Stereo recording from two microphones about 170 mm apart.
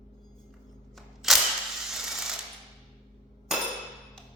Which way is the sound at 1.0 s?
Centre (ahead or behind).